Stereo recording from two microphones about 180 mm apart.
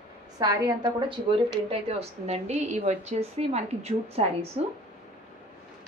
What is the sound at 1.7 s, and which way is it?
A woman's voice, 35° right (ahead or behind).